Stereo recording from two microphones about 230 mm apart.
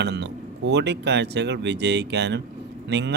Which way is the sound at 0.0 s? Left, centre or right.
Right.